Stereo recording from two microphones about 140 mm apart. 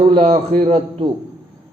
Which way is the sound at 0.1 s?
45° right (ahead or behind).